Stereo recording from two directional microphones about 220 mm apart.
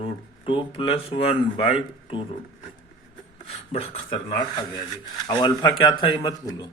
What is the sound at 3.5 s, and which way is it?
Speech, 30° left (ahead or behind).